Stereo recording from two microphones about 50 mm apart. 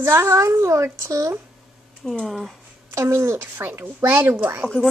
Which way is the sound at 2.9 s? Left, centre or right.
Right.